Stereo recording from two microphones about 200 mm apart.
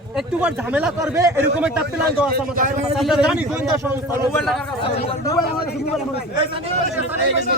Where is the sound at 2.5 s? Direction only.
35° right (ahead or behind).